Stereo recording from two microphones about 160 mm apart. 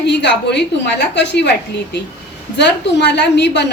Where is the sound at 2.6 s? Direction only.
90° left.